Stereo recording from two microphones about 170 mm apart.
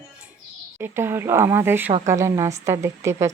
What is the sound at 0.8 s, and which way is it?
Speech, 15° right (ahead or behind).